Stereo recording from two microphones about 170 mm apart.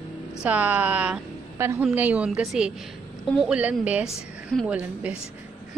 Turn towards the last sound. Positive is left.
turn(degrees=-5)  # may be behind; listen again after turning